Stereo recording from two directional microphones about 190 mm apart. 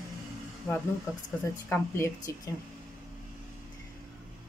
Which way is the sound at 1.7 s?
15° left (ahead or behind).